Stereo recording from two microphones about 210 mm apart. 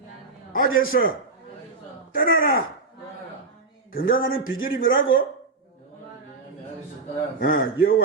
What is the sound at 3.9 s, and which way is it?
Speech, 45° left (ahead or behind).